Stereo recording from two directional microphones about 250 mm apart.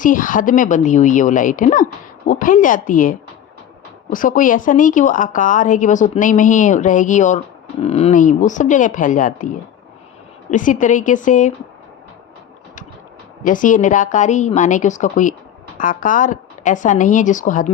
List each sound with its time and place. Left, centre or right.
0.0 s a woman's voice: left
10.5 s a woman's voice: left
13.4 s a woman's voice: left